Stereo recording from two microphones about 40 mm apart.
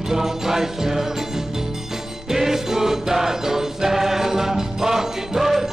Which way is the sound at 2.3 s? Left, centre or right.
Centre.